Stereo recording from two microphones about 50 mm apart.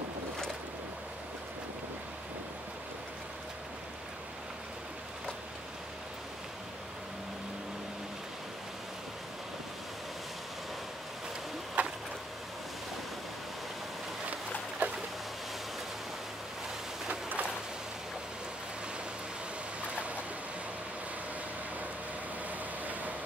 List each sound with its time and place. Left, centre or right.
11.8 s vehicle: right
14.8 s boat: right
17.1 s a sound: right